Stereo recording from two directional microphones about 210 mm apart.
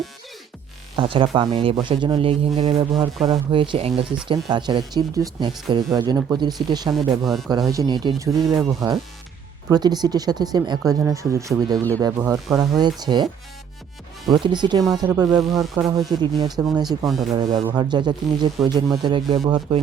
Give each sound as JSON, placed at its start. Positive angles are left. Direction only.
{"t": 0.9, "sound": "speech", "side_deg": -25}
{"t": 7.3, "sound": "speech", "side_deg": 0}
{"t": 7.7, "sound": "speech", "side_deg": -20}
{"t": 14.3, "sound": "speech", "side_deg": -20}
{"t": 17.1, "sound": "speech", "side_deg": 0}
{"t": 17.3, "sound": "speech", "side_deg": -20}